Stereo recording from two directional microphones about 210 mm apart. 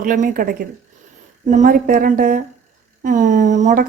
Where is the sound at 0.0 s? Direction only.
40° right (ahead or behind).